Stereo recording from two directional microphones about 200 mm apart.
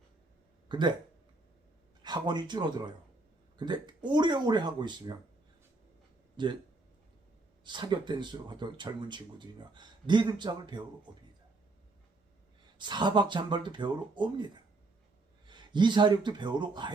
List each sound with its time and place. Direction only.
0.7 s speech: 20° right (ahead or behind)
2.0 s speech: 20° right (ahead or behind)
6.4 s speech: 20° right (ahead or behind)
7.6 s speech: 20° right (ahead or behind)
12.8 s speech: 20° right (ahead or behind)